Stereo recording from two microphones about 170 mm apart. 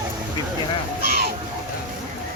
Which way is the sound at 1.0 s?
60° right (ahead or behind).